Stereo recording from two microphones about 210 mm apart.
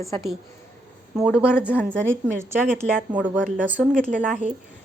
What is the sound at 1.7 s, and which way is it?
Speech, 5° left (ahead or behind).